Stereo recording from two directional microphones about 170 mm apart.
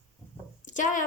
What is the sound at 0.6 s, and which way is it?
Speech, 50° left (ahead or behind).